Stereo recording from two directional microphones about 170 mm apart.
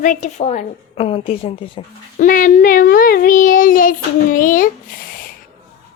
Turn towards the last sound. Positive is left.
turn(degrees=55)  # may be behind; listen again after turning